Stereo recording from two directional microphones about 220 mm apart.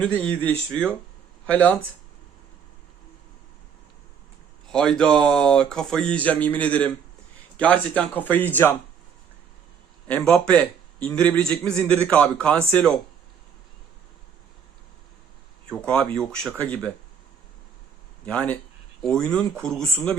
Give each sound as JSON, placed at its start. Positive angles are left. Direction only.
{"t": 0.0, "sound": "speech", "side_deg": 5}
{"t": 4.7, "sound": "speech", "side_deg": 5}
{"t": 10.1, "sound": "speech", "side_deg": 5}
{"t": 15.7, "sound": "speech", "side_deg": 5}
{"t": 18.3, "sound": "speech", "side_deg": 5}